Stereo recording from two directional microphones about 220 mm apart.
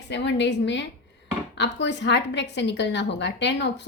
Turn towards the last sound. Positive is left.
turn(degrees=50)  # may be behind; listen again after turning